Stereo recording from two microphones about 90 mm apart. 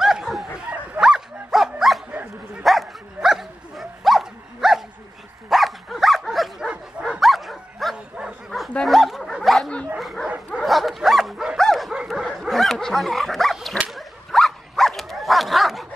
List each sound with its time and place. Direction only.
0.0 s snicker: centre (ahead or behind)
0.7 s dog: 10° right (ahead or behind)
6.7 s bow-wow: 5° right (ahead or behind)
9.9 s dog: centre (ahead or behind)
10.2 s dog: 10° right (ahead or behind)
10.6 s dog: centre (ahead or behind)
11.9 s dog: 10° right (ahead or behind)
12.3 s dog: 5° left (ahead or behind)